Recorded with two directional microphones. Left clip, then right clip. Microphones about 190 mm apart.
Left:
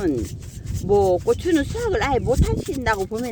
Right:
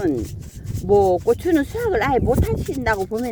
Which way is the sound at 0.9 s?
30° right (ahead or behind).